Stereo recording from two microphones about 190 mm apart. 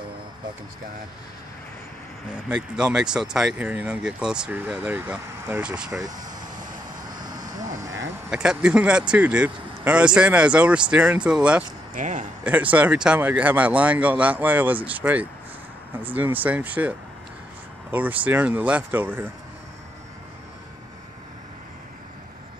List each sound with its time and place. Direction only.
2.5 s speech: 5° right (ahead or behind)
5.9 s speech: 20° right (ahead or behind)
6.1 s vehicle: 45° right (ahead or behind)
7.2 s vehicle: 20° right (ahead or behind)
8.3 s speech: 5° right (ahead or behind)
11.9 s speech: 40° right (ahead or behind)
12.4 s speech: 10° right (ahead or behind)
17.9 s speech: 10° right (ahead or behind)